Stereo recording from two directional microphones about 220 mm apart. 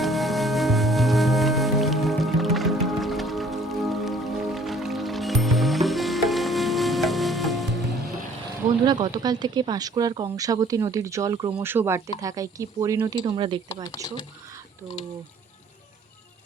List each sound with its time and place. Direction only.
0.0 s music: centre (ahead or behind)
8.9 s speech: 20° right (ahead or behind)